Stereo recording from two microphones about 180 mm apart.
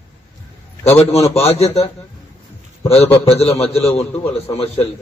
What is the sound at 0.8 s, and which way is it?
A man's voice, 35° left (ahead or behind).